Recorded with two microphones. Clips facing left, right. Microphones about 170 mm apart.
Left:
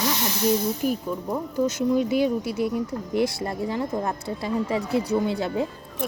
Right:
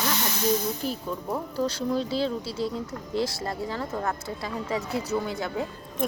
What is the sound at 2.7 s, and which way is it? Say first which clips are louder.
Speech: left 5 dB; 20° left (ahead or behind).